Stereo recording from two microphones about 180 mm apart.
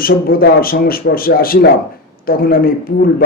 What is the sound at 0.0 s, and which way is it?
A man's voice, 55° left (ahead or behind).